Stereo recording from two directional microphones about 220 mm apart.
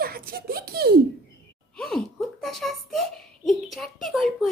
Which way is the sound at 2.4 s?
Centre (ahead or behind).